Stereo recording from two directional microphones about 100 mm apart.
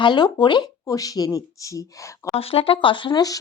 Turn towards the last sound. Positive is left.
turn(degrees=40)  # may be behind; listen again after turning